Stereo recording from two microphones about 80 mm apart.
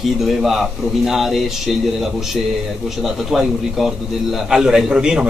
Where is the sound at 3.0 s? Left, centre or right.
Centre.